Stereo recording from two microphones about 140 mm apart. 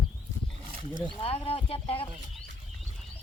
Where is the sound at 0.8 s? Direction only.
35° right (ahead or behind).